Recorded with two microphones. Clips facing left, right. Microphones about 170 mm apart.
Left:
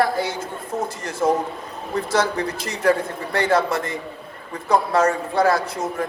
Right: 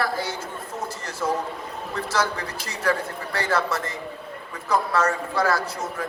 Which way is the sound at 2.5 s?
30° right (ahead or behind).